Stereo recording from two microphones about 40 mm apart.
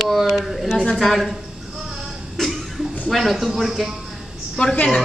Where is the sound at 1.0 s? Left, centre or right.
Centre.